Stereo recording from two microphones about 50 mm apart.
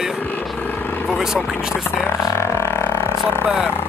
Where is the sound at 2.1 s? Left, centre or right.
Left.